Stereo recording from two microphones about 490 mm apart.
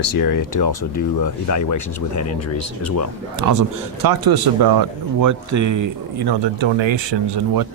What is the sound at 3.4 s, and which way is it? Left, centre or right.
Speech, right.